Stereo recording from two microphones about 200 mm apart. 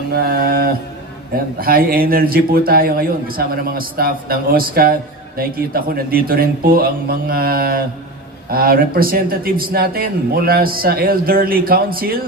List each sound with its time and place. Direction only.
0.1 s speech: 50° right (ahead or behind)